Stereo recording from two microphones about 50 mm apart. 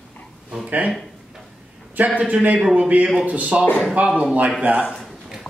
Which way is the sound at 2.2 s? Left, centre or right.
Right.